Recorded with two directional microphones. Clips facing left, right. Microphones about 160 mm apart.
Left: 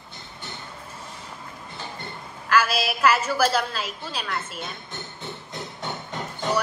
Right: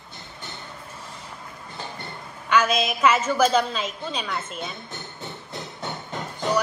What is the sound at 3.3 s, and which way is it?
Speech, 5° left (ahead or behind).